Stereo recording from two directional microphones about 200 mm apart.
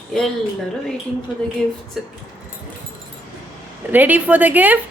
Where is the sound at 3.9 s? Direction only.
10° right (ahead or behind).